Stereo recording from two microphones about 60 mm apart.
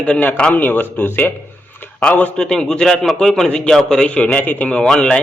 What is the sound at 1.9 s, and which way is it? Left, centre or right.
Speech, left.